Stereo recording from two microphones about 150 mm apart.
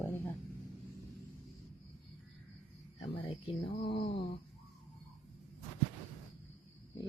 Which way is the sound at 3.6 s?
35° left (ahead or behind).